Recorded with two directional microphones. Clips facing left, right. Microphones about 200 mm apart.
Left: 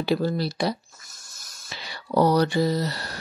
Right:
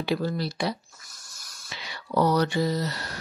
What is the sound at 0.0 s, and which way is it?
Speech, 35° left (ahead or behind).